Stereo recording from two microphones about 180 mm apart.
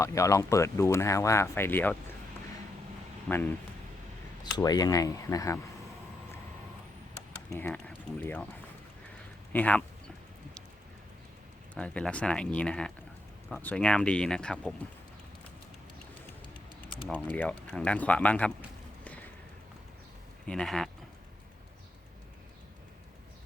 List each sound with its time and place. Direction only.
0.0 s speech: 15° left (ahead or behind)
3.2 s speech: 10° left (ahead or behind)
4.5 s speech: 20° left (ahead or behind)
7.5 s speech: 10° left (ahead or behind)
9.5 s speech: 10° left (ahead or behind)
11.7 s speech: 5° left (ahead or behind)
17.1 s speech: 5° left (ahead or behind)
19.0 s a sound: 10° left (ahead or behind)
20.5 s speech: centre (ahead or behind)